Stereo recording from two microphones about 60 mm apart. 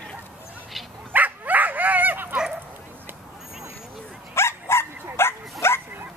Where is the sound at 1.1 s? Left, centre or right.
Right.